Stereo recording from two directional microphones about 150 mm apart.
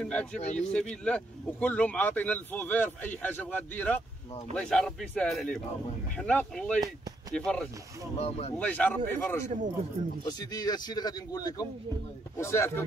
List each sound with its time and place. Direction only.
0.0 s a man's voice: 5° left (ahead or behind)
6.8 s speech: 25° right (ahead or behind)
7.3 s a man's voice: 5° left (ahead or behind)
8.2 s speech: 45° left (ahead or behind)
8.5 s speech: 10° left (ahead or behind)
10.2 s speech: 25° left (ahead or behind)